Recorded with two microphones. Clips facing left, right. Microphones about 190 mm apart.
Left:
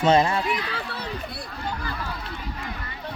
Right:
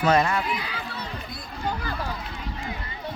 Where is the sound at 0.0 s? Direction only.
25° left (ahead or behind).